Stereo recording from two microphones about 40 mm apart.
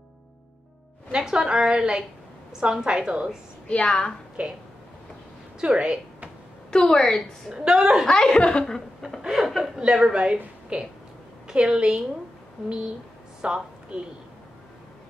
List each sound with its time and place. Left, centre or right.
1.1 s a woman's voice: centre
3.6 s speech: left
4.4 s a woman's voice: right
5.6 s a woman's voice: right
6.7 s a woman's voice: centre
7.5 s a woman's voice: centre
8.1 s speech: centre
9.2 s speech: centre
10.0 s a woman's voice: right